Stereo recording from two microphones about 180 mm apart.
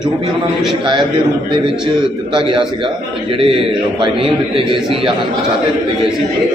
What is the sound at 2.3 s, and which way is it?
A man's voice, 30° right (ahead or behind).